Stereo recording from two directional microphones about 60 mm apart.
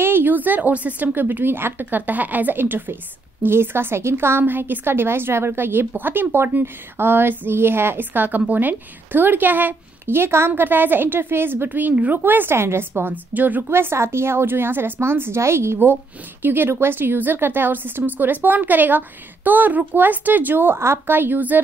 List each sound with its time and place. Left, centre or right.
0.0 s a woman's voice: right
13.1 s a woman's voice: right